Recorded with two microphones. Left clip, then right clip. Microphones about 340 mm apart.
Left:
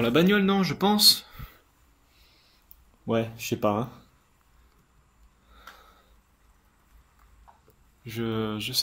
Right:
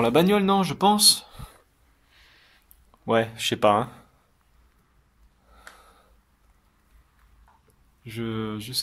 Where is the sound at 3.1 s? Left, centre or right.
Right.